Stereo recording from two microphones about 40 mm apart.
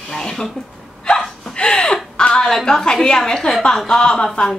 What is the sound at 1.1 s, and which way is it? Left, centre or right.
Gasp, centre.